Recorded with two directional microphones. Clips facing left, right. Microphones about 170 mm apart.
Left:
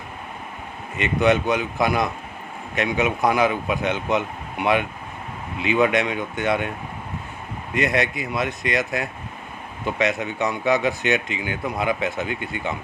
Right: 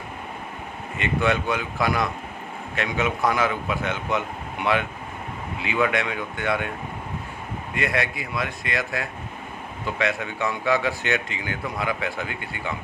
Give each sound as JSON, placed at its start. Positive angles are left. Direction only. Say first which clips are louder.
{"t": 0.9, "sound": "speech", "louder": "left 4 dB", "side_deg": 20}
{"t": 7.8, "sound": "speech", "louder": "left 4 dB", "side_deg": 20}